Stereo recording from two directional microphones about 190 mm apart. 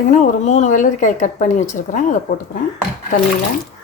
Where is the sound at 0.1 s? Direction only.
40° left (ahead or behind).